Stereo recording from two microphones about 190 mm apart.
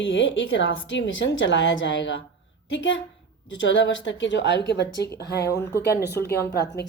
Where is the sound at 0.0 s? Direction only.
80° left.